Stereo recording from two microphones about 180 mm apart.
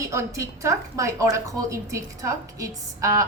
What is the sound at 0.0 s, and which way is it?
A woman's voice, 15° right (ahead or behind).